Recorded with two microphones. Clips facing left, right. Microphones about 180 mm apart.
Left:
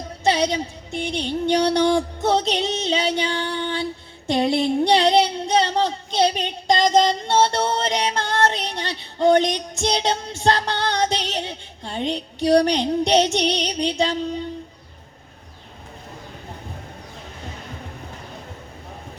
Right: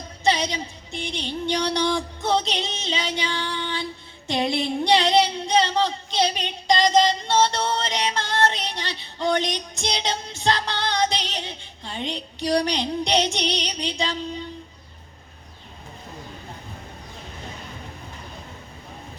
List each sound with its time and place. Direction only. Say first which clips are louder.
0.3 s speech: left 3 dB; 50° left (ahead or behind)